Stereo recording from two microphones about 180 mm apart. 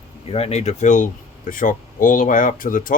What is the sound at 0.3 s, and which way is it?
Speech, 35° left (ahead or behind).